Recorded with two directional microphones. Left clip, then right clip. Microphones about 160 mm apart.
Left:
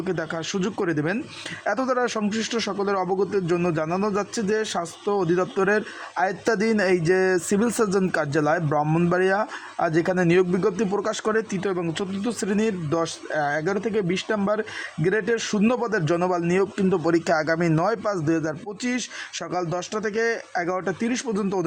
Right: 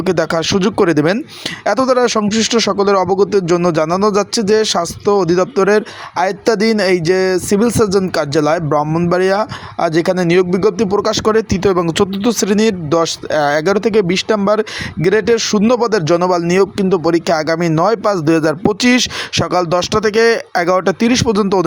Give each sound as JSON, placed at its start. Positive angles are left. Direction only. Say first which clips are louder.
{"t": 0.0, "sound": "speech", "louder": "right 13 dB", "side_deg": -35}